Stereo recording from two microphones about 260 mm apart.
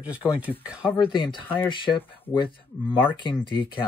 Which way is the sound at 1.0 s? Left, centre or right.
Centre.